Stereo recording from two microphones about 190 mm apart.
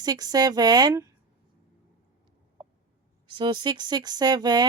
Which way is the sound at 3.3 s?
25° right (ahead or behind).